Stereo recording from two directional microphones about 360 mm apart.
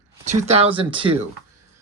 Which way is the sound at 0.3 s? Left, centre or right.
Centre.